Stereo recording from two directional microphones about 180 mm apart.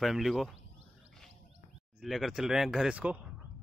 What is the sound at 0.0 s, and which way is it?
Speech, centre (ahead or behind).